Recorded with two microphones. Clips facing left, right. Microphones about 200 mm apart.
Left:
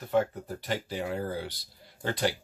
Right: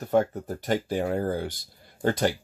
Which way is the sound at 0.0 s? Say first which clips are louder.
Right 4 dB; 45° right (ahead or behind).